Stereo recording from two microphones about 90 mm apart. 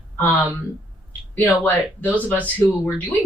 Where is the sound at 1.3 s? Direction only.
20° left (ahead or behind).